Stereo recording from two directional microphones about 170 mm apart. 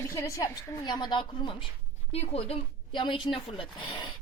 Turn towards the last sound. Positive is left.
turn(degrees=30)  # may be behind; listen again after turning